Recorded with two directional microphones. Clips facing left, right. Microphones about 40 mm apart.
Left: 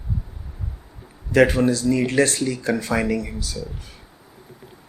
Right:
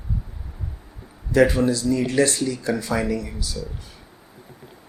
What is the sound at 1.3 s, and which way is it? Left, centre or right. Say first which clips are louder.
A man's voice: left 1 dB; left.